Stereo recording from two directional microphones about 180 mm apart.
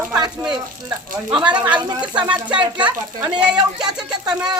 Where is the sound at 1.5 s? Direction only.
25° right (ahead or behind).